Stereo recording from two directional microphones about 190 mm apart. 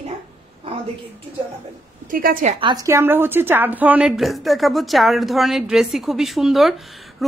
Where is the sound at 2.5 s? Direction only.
20° right (ahead or behind).